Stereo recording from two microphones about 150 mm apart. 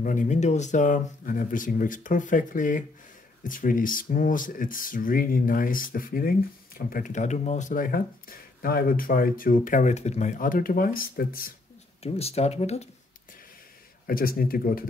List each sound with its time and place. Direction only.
0.0 s speech: 60° left (ahead or behind)
6.9 s speech: 55° left (ahead or behind); by 11.5 s 75° left (ahead or behind)
12.0 s speech: 40° left (ahead or behind)
14.0 s speech: 75° left (ahead or behind)